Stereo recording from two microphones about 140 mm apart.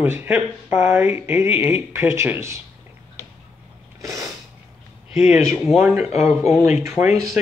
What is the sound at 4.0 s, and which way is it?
Sneeze, 25° right (ahead or behind).